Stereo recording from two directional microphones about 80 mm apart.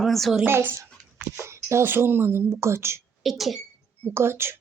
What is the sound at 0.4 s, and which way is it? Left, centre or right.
A child's voice, right.